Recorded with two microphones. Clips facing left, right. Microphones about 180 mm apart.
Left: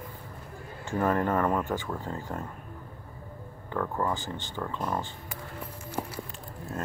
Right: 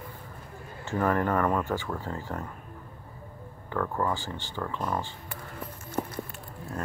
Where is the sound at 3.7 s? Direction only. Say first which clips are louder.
Right 1 dB; 15° left (ahead or behind).